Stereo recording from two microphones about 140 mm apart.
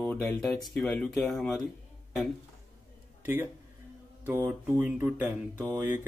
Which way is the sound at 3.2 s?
15° right (ahead or behind).